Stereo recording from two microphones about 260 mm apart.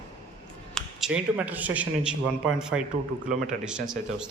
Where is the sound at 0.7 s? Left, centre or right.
Centre.